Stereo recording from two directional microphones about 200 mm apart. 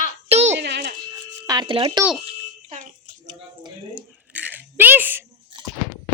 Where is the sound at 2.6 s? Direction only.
40° right (ahead or behind).